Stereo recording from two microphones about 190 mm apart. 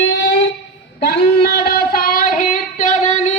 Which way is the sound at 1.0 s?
55° left (ahead or behind).